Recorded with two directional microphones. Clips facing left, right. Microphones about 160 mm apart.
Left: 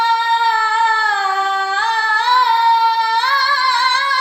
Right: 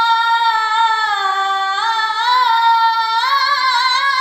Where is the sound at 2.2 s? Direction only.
10° left (ahead or behind).